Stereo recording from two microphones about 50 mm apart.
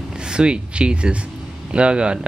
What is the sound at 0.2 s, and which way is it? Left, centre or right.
Speech, centre.